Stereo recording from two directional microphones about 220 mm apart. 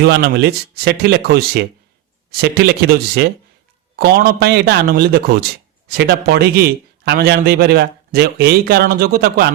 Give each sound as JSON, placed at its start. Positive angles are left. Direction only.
{"t": 0.0, "sound": "a man's voice", "side_deg": -45}